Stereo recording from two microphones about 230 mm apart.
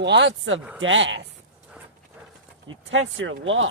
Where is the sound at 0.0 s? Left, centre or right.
Right.